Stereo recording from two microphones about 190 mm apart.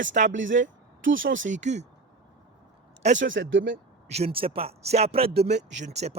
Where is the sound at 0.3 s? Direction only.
80° right.